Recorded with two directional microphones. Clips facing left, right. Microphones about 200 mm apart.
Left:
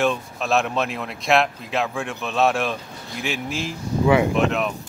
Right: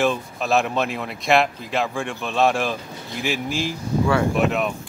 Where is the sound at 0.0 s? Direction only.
Centre (ahead or behind).